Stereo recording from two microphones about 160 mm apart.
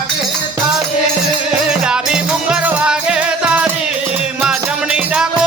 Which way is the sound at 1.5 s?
5° right (ahead or behind).